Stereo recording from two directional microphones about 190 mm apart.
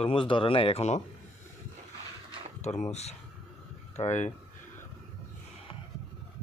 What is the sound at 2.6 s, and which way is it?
Speech, 35° left (ahead or behind).